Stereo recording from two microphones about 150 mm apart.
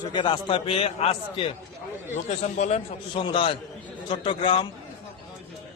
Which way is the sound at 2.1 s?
50° left (ahead or behind).